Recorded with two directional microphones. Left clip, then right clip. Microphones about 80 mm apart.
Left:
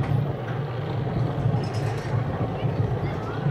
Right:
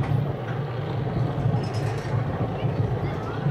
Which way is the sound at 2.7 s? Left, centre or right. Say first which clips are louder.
Even; centre.